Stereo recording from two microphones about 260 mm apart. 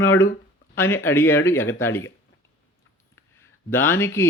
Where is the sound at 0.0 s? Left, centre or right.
Centre.